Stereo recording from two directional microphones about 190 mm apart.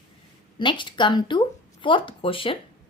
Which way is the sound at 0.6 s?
25° left (ahead or behind).